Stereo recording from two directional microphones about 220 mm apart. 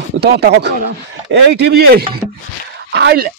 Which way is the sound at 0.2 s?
50° right (ahead or behind).